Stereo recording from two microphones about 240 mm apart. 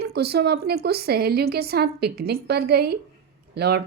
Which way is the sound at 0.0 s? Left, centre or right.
Right.